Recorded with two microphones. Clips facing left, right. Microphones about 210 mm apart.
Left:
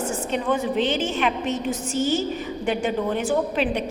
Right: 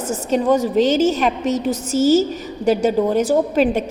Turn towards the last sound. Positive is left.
turn(degrees=-40)  # may be behind; listen again after turning